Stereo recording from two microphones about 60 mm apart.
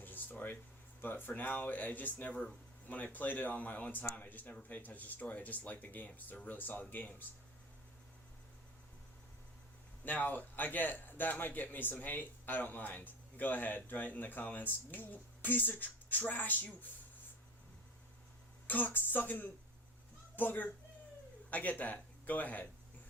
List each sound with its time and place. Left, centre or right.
0.0 s a sound: left
1.0 s speech: left
10.0 s speech: left
18.9 s a child's voice: left